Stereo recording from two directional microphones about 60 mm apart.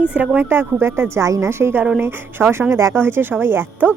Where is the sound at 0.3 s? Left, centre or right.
Right.